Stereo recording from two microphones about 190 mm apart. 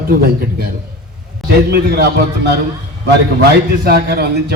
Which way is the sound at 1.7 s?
55° right (ahead or behind).